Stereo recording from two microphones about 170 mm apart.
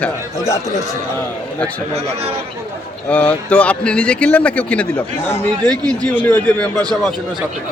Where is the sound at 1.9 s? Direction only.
40° right (ahead or behind).